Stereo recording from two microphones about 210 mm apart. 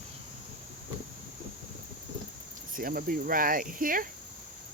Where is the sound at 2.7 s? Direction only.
40° right (ahead or behind).